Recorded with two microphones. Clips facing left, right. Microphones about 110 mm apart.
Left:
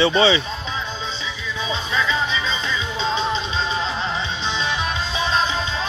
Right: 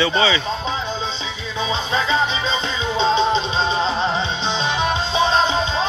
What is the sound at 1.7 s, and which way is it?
Music, 30° right (ahead or behind).